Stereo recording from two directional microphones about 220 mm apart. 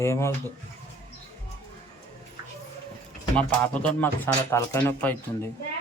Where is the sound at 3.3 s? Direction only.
5° left (ahead or behind).